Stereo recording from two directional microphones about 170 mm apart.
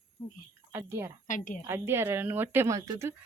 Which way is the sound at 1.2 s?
50° left (ahead or behind).